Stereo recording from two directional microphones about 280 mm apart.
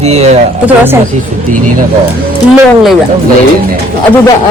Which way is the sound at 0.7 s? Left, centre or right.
Centre.